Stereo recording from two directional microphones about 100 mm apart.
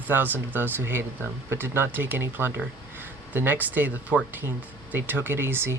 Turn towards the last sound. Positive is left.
turn(degrees=-20)  # may be behind; listen again after turning